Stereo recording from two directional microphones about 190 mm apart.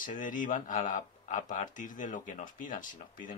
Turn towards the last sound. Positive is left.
turn(degrees=45)  # may be behind; listen again after turning